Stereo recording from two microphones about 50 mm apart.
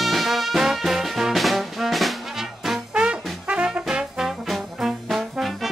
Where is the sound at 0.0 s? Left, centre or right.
Centre.